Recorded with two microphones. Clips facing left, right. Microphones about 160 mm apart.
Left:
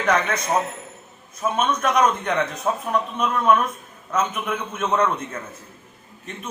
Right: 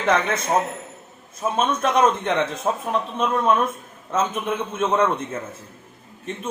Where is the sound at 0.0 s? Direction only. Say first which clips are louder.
Right 1 dB; 25° right (ahead or behind).